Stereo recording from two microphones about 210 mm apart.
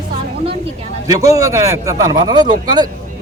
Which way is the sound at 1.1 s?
15° right (ahead or behind).